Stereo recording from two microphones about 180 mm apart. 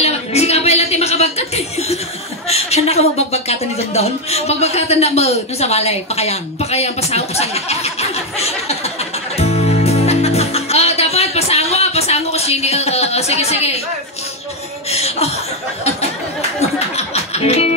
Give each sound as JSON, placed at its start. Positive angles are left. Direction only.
{"t": 0.0, "sound": "chuckle", "side_deg": 35}
{"t": 2.4, "sound": "a man's voice", "side_deg": 35}
{"t": 9.4, "sound": "music", "side_deg": 35}
{"t": 14.9, "sound": "a man's voice", "side_deg": 35}
{"t": 16.9, "sound": "music", "side_deg": 35}